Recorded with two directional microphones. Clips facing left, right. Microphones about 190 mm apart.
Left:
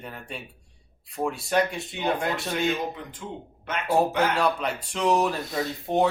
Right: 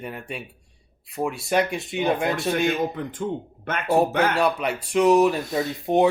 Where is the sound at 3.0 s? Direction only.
55° right (ahead or behind).